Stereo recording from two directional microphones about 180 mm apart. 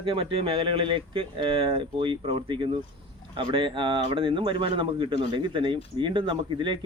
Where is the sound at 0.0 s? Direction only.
30° right (ahead or behind).